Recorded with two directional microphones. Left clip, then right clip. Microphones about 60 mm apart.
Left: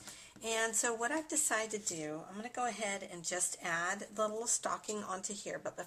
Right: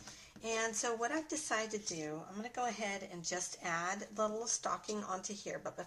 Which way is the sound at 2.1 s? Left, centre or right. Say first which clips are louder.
Left 1 dB; centre.